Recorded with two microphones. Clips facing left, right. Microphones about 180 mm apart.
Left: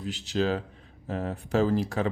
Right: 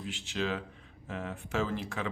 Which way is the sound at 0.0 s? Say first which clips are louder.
Left 7 dB; 40° left (ahead or behind).